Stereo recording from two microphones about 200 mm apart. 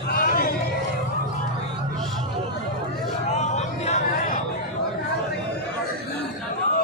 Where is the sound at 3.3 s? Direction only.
35° left (ahead or behind).